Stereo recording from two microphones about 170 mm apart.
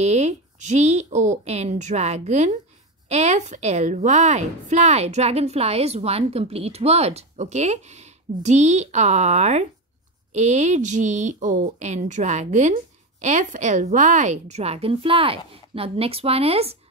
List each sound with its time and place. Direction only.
0.0 s a woman's voice: 40° right (ahead or behind)